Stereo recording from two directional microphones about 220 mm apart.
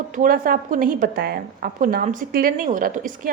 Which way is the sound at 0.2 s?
40° right (ahead or behind).